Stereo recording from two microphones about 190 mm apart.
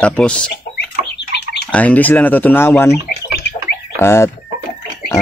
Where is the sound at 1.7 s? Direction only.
10° left (ahead or behind).